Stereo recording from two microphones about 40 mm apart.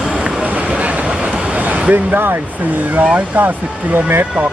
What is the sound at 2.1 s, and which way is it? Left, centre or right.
Speech, right.